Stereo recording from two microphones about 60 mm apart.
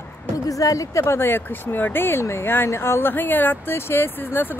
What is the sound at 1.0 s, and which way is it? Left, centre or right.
Speech, left.